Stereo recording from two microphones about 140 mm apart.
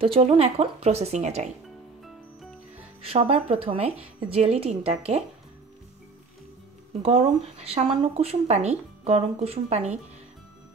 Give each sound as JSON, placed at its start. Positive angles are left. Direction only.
{"t": 0.0, "sound": "speech", "side_deg": -45}
{"t": 3.0, "sound": "speech", "side_deg": -45}
{"t": 7.0, "sound": "speech", "side_deg": -45}